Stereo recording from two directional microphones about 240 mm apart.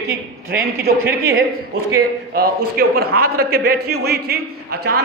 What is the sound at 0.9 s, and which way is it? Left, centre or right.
A man's voice, right.